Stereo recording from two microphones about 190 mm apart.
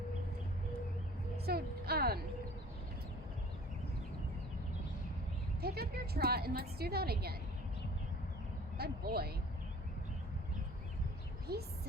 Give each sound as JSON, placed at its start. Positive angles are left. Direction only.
{"t": 1.5, "sound": "a sound", "side_deg": -55}
{"t": 5.6, "sound": "a woman's voice", "side_deg": -55}
{"t": 8.8, "sound": "a woman's voice", "side_deg": -55}
{"t": 11.5, "sound": "a woman's voice", "side_deg": -55}